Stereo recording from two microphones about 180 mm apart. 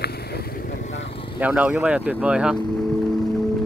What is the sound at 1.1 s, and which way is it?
Vehicle, 30° left (ahead or behind).